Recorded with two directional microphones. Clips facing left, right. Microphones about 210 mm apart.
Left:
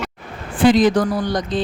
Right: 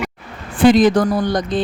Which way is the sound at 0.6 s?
50° right (ahead or behind).